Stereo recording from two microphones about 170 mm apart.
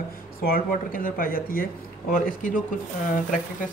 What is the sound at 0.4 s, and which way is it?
Speech, 55° left (ahead or behind).